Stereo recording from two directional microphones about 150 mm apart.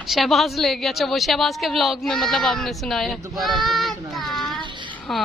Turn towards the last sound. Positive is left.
turn(degrees=0)  # may be behind; listen again after turning